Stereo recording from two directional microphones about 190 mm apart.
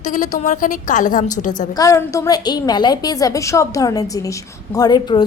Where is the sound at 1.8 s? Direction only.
15° left (ahead or behind).